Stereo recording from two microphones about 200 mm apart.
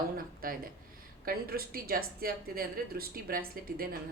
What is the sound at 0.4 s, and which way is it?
Speech, 45° right (ahead or behind).